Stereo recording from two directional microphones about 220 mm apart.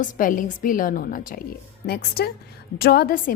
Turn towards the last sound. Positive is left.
turn(degrees=40)  # may be behind; listen again after turning